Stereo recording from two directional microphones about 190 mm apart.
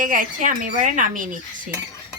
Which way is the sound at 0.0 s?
45° right (ahead or behind).